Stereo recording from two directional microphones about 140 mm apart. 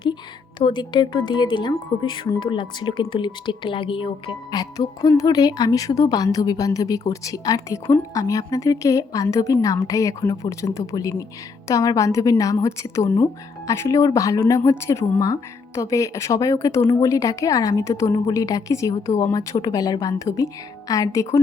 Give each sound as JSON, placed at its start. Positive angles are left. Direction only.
{"t": 0.6, "sound": "speech", "side_deg": 35}